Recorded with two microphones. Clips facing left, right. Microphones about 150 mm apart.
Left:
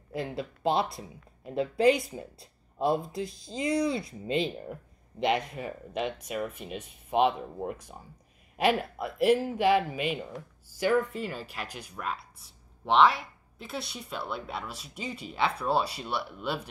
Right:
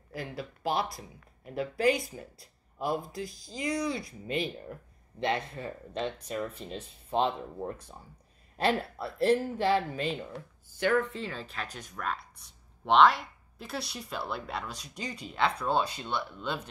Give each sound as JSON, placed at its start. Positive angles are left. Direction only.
{"t": 0.1, "sound": "speech", "side_deg": 25}